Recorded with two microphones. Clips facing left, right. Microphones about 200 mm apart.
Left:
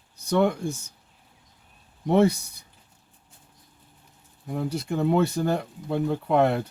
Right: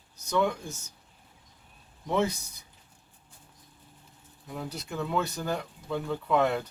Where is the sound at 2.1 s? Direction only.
60° left (ahead or behind).